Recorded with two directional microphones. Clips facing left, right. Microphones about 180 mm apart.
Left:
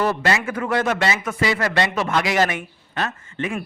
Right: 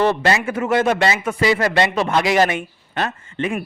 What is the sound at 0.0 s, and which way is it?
A man's voice, 30° right (ahead or behind).